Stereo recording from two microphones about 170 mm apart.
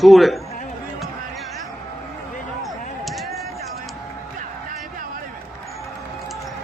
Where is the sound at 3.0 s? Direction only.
Centre (ahead or behind).